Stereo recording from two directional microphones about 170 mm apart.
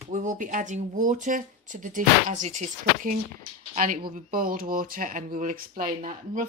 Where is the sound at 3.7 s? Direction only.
55° right (ahead or behind).